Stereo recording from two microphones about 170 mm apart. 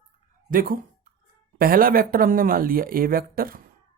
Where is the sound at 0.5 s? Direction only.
55° right (ahead or behind).